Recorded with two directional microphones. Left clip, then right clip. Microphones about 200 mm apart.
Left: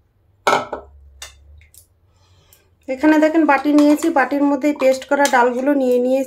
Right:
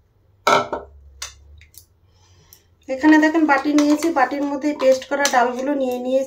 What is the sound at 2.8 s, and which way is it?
Speech, 40° left (ahead or behind).